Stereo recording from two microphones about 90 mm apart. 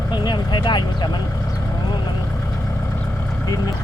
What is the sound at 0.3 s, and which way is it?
Speech, 55° left (ahead or behind).